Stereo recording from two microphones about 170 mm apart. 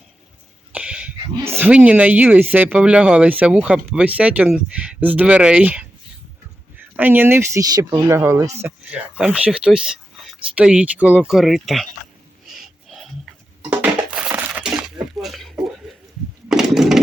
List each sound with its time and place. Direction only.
0.7 s speech: 5° right (ahead or behind)
8.6 s speech: 5° right (ahead or behind)
12.5 s a sound: centre (ahead or behind)